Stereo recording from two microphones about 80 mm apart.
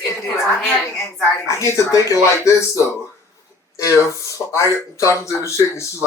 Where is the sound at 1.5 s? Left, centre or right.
Left.